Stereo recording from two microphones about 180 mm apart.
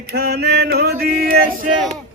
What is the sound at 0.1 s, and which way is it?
Music, 60° right (ahead or behind).